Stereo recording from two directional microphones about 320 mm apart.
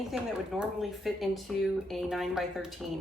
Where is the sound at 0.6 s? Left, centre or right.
Centre.